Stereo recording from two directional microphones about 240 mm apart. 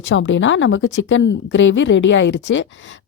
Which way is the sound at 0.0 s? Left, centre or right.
Left.